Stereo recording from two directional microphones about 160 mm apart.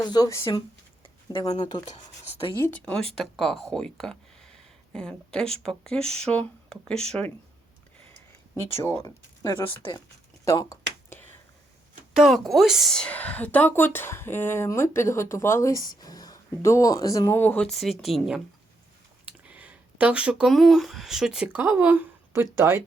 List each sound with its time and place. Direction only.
0.0 s speech: 25° left (ahead or behind)
2.6 s speech: 5° left (ahead or behind)
8.8 s speech: 15° left (ahead or behind)
10.4 s a sound: 20° left (ahead or behind)
12.1 s speech: centre (ahead or behind)